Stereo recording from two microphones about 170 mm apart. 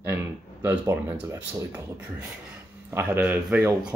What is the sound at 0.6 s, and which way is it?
Speech, 15° right (ahead or behind).